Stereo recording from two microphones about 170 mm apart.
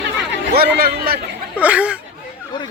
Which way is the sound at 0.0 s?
80° right.